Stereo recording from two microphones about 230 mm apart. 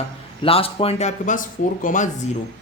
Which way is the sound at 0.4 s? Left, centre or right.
Left.